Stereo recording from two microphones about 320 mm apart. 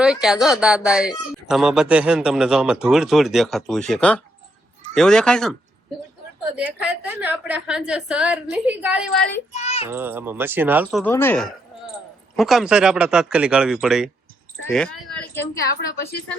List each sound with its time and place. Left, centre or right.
0.0 s a woman's voice: centre
6.6 s a woman's voice: centre
9.6 s a child's voice: centre
9.9 s speech: centre
11.0 s a woman's voice: centre